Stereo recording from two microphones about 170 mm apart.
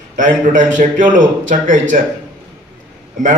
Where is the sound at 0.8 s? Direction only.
50° right (ahead or behind).